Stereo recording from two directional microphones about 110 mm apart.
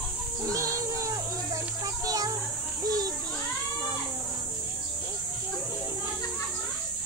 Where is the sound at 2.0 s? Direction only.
30° right (ahead or behind).